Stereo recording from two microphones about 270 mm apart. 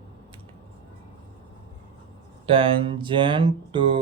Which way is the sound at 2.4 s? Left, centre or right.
Centre.